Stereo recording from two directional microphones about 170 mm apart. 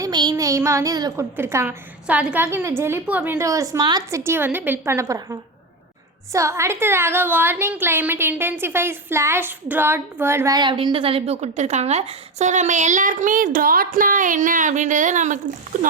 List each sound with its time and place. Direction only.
0.0 s a woman's voice: 25° right (ahead or behind); by 15.4 s 45° right (ahead or behind)